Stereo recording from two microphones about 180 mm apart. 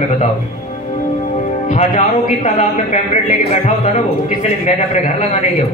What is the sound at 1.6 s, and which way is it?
Speech, 45° left (ahead or behind).